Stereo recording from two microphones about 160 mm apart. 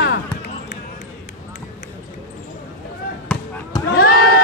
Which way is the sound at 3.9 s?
70° left (ahead or behind).